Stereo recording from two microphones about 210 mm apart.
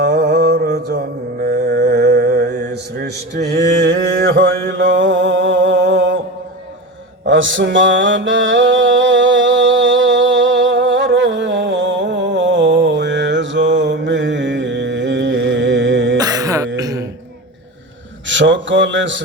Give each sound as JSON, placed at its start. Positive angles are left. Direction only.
{"t": 0.0, "sound": "mantra", "side_deg": -50}
{"t": 7.3, "sound": "mantra", "side_deg": -60}
{"t": 16.1, "sound": "throat clearing", "side_deg": -15}
{"t": 18.3, "sound": "a sound", "side_deg": -60}